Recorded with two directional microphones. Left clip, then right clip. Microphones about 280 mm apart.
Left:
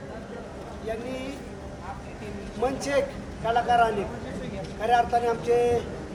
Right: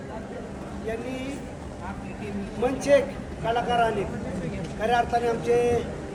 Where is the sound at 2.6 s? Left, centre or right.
Centre.